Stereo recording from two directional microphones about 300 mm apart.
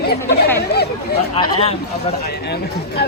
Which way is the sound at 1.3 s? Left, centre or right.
Centre.